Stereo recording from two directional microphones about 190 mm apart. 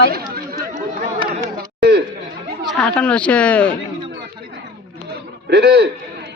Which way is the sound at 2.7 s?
5° left (ahead or behind).